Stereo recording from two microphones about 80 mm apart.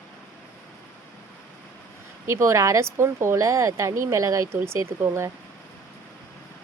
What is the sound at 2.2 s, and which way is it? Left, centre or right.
Speech, right.